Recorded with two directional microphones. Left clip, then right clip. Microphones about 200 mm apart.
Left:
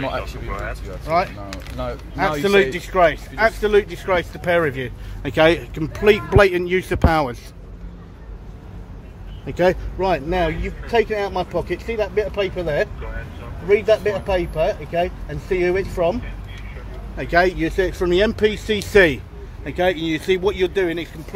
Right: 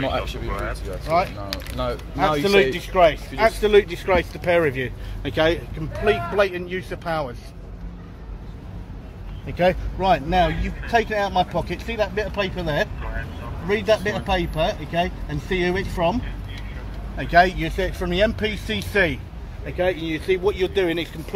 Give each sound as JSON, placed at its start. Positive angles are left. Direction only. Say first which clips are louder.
{"t": 0.5, "sound": "speech", "louder": "even", "side_deg": 15}
{"t": 1.0, "sound": "speech", "louder": "left 1 dB", "side_deg": 30}
{"t": 1.5, "sound": "speech", "louder": "right 2 dB", "side_deg": 0}
{"t": 2.1, "sound": "speech", "louder": "left 1 dB", "side_deg": 30}
{"t": 3.3, "sound": "speech", "louder": "even", "side_deg": 0}
{"t": 5.3, "sound": "speech", "louder": "left 5 dB", "side_deg": 35}
{"t": 5.9, "sound": "speech", "louder": "left 5 dB", "side_deg": 55}
{"t": 9.5, "sound": "speech", "louder": "left 2 dB", "side_deg": 45}
{"t": 9.9, "sound": "speech", "louder": "right 1 dB", "side_deg": 30}
{"t": 17.2, "sound": "speech", "louder": "even", "side_deg": 35}